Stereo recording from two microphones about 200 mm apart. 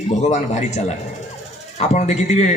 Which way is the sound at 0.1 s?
35° left (ahead or behind).